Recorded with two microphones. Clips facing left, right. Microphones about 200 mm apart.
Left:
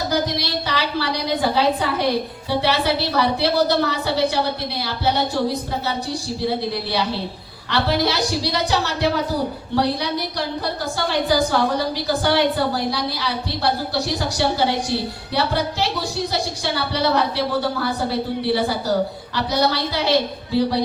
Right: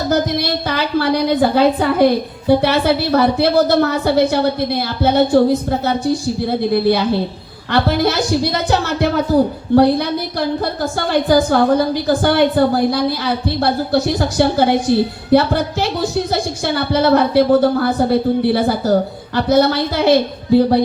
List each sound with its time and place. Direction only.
0.1 s a woman's voice: 50° right (ahead or behind)